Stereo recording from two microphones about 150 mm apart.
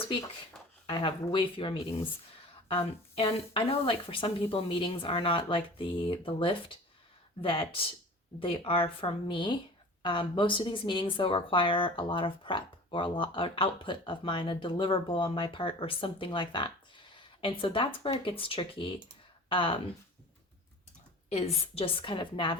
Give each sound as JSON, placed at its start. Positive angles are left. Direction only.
{"t": 0.9, "sound": "a woman's voice", "side_deg": 30}
{"t": 21.2, "sound": "speech", "side_deg": 45}